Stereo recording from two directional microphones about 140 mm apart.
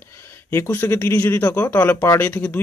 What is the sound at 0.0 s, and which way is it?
Speech, 15° left (ahead or behind).